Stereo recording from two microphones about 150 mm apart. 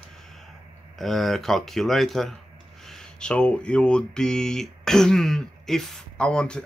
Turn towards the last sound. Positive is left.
turn(degrees=5)  # may be behind; listen again after turning